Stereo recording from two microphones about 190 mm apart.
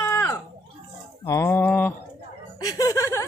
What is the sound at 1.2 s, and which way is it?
Music, 15° left (ahead or behind).